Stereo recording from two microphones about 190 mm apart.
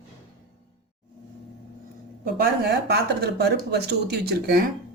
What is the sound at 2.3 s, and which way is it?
Speech, 60° right (ahead or behind).